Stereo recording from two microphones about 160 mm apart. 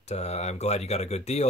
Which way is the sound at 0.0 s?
40° left (ahead or behind).